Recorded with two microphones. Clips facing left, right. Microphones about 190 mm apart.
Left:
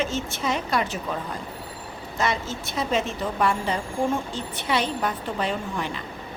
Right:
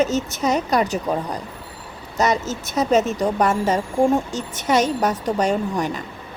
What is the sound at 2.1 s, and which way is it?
A woman's voice, 40° right (ahead or behind).